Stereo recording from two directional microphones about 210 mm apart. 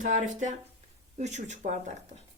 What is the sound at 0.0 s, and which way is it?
Speech, 35° right (ahead or behind).